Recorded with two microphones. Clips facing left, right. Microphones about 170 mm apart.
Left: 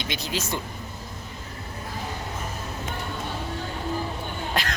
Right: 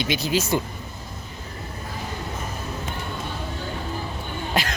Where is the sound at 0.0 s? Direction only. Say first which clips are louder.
Right 7 dB; 5° right (ahead or behind).